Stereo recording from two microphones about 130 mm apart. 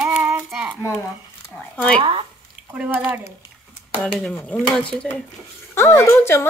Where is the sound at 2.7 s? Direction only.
10° right (ahead or behind).